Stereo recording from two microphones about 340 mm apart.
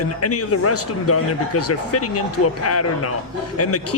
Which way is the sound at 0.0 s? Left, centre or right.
Left.